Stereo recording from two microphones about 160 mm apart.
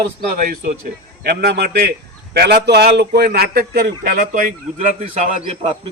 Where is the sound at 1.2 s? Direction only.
80° right.